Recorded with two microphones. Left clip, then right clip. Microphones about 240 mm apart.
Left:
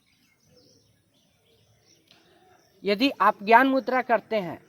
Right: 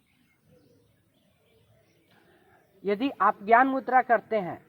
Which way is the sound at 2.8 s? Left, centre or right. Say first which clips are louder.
Left 3 dB; left.